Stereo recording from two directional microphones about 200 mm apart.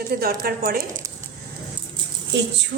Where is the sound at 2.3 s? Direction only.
60° right (ahead or behind).